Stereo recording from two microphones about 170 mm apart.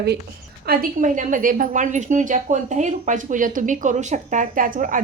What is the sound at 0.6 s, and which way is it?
A woman's voice, 60° right (ahead or behind).